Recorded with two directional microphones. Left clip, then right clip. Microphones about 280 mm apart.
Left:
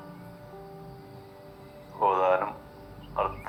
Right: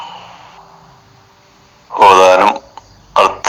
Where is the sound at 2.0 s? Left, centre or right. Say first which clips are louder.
Right 18 dB; right.